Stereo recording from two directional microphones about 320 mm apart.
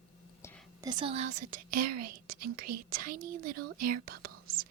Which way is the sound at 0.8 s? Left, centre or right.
Centre.